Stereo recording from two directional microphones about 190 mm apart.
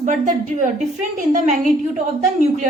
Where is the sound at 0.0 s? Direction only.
40° right (ahead or behind).